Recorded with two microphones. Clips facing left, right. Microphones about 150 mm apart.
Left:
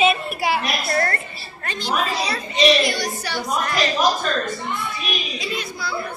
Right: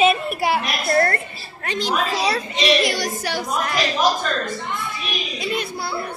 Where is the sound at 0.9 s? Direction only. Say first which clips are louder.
Right 5 dB; 40° right (ahead or behind).